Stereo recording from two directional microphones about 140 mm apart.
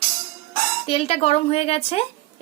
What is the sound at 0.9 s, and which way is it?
A woman's voice, 45° left (ahead or behind).